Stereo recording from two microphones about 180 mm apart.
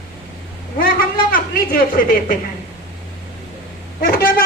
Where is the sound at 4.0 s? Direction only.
55° left (ahead or behind).